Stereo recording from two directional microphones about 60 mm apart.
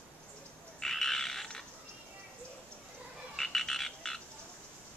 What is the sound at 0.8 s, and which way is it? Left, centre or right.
Frog, centre.